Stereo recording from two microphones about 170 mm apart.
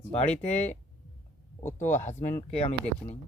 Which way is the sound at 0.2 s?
40° left (ahead or behind).